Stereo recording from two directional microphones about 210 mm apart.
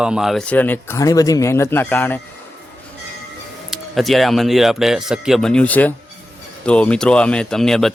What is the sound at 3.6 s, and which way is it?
Speech, centre (ahead or behind).